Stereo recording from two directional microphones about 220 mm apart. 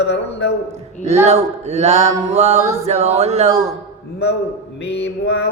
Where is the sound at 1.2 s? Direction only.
30° right (ahead or behind).